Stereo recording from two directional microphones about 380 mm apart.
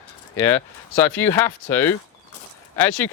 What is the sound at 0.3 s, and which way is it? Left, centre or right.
Speech, centre.